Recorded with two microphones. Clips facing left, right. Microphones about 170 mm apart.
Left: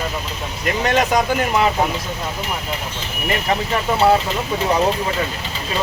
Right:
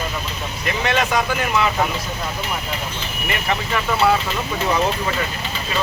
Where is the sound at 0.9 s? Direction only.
40° left (ahead or behind).